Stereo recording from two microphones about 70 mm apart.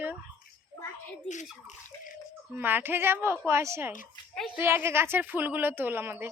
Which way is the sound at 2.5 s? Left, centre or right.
Right.